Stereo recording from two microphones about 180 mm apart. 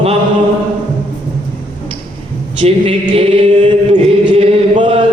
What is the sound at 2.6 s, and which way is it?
Chant, 30° right (ahead or behind).